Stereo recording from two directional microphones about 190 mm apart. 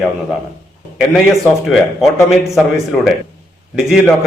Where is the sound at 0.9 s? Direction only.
Centre (ahead or behind).